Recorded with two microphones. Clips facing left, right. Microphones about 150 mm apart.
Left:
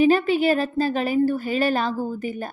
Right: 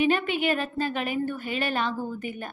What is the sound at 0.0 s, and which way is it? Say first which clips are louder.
A woman's voice: left 6 dB; 35° left (ahead or behind).